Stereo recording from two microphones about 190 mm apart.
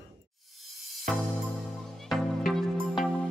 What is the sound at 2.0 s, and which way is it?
Music, centre (ahead or behind).